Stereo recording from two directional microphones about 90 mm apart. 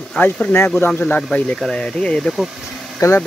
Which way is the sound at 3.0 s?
45° left (ahead or behind).